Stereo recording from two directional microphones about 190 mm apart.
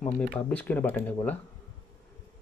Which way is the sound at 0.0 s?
5° left (ahead or behind).